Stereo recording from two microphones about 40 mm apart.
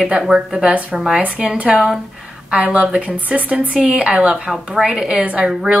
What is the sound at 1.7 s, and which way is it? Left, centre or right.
Speech, centre.